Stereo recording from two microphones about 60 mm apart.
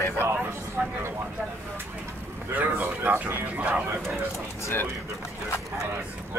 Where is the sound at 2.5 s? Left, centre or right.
Right.